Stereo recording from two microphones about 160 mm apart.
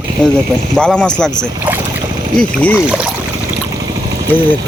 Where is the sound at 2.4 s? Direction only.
10° left (ahead or behind).